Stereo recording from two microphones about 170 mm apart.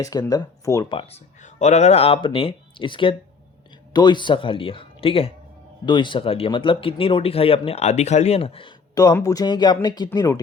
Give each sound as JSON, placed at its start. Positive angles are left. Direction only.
{"t": 0.0, "sound": "speech", "side_deg": 20}
{"t": 0.9, "sound": "speech", "side_deg": 35}
{"t": 9.0, "sound": "speech", "side_deg": 20}